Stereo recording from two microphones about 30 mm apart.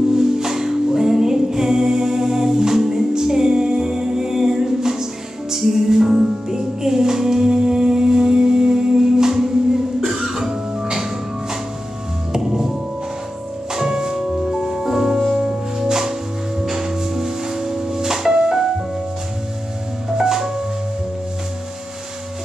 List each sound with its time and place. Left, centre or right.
0.1 s music: centre
12.3 s music: centre
13.7 s music: centre
14.5 s music: right
14.9 s music: centre
20.2 s music: centre